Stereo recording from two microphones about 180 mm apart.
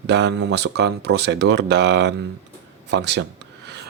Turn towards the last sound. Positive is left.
turn(degrees=-70)  # may be behind; listen again after turning